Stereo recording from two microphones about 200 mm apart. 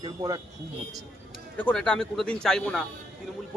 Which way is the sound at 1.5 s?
5° left (ahead or behind).